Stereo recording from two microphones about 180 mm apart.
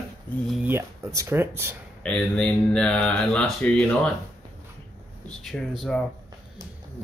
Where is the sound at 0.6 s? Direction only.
15° right (ahead or behind).